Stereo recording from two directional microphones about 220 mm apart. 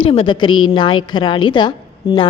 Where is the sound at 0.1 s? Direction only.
25° left (ahead or behind).